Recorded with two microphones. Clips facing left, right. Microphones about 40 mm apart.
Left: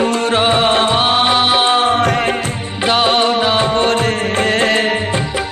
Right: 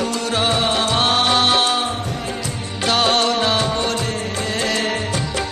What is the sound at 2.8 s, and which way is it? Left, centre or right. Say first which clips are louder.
Music: left 4 dB; left.